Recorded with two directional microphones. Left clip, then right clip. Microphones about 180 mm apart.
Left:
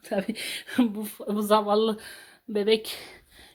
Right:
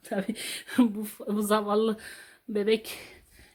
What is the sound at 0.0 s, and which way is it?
Speech, 10° left (ahead or behind).